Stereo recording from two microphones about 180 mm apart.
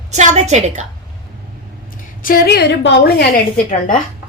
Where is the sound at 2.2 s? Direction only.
55° left (ahead or behind).